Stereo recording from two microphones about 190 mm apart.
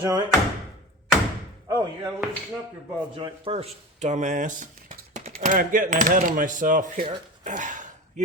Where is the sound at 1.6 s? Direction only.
20° right (ahead or behind).